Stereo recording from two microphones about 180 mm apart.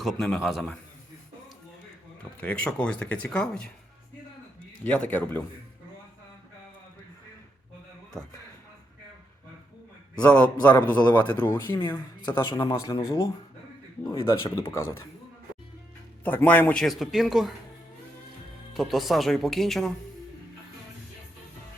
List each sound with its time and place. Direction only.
0.0 s a man's voice: centre (ahead or behind)
2.4 s a man's voice: 5° left (ahead or behind)
4.8 s a man's voice: 10° left (ahead or behind)
10.2 s a man's voice: 5° left (ahead or behind); by 14.5 s 25° left (ahead or behind)
14.7 s a man's voice: 15° left (ahead or behind)
16.2 s a man's voice: 10° left (ahead or behind)
18.7 s a man's voice: centre (ahead or behind)